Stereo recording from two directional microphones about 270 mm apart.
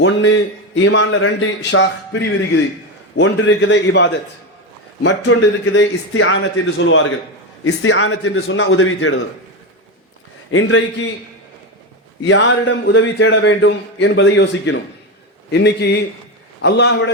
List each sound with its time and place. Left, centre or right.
0.0 s a man's voice: left
10.5 s a man's voice: left
12.2 s a man's voice: left